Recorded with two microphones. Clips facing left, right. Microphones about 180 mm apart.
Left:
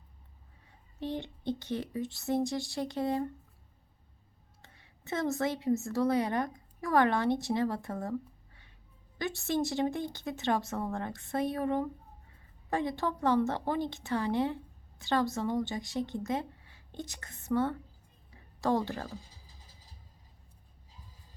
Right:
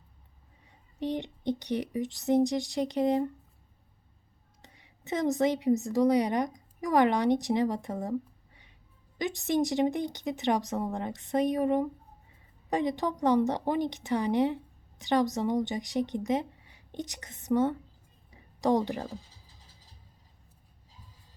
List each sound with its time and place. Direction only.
0.9 s a woman's voice: 15° right (ahead or behind)
4.6 s a woman's voice: 15° right (ahead or behind)
9.1 s a woman's voice: 15° right (ahead or behind)